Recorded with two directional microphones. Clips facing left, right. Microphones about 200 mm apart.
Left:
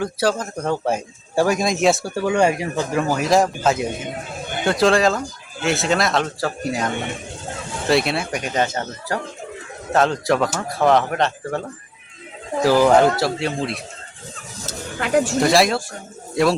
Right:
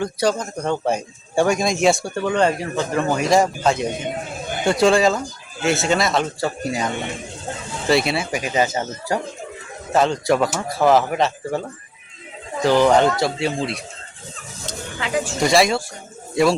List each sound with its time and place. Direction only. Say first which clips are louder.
0.0 s speech: even; 5° left (ahead or behind)
9.9 s speech: even; centre (ahead or behind)
12.6 s speech: left 1 dB; 5° left (ahead or behind)
14.9 s speech: left 5 dB; 50° left (ahead or behind)
15.4 s speech: right 4 dB; centre (ahead or behind)